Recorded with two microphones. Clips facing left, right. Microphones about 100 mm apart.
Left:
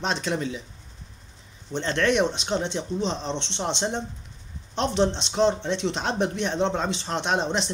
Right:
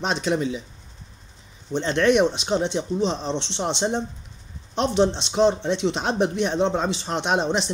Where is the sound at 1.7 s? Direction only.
10° right (ahead or behind).